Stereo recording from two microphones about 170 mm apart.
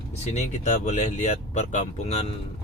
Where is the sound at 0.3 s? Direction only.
45° left (ahead or behind).